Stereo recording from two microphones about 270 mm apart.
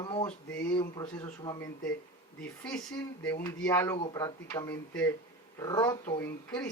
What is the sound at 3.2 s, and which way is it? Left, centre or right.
Speech, centre.